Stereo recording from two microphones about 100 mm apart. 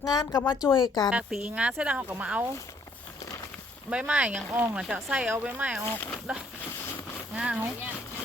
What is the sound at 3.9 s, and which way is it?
Speech, 10° right (ahead or behind).